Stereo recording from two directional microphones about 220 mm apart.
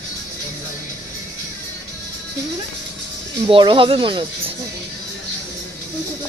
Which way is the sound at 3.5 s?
25° right (ahead or behind).